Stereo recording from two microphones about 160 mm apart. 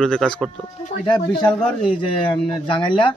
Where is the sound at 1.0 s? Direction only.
30° left (ahead or behind).